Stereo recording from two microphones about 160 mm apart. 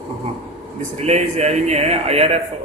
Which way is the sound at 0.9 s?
40° right (ahead or behind).